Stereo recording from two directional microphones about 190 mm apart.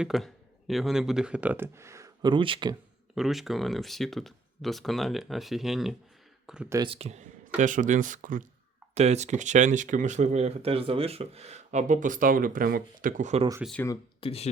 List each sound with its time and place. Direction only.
0.0 s speech: centre (ahead or behind); by 2.7 s 25° right (ahead or behind)
3.2 s speech: centre (ahead or behind)
6.4 s a sound: 5° right (ahead or behind)
6.7 s speech: 25° right (ahead or behind)
14.2 s speech: 30° left (ahead or behind)